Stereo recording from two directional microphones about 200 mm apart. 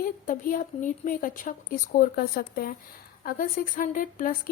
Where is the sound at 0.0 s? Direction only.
45° left (ahead or behind).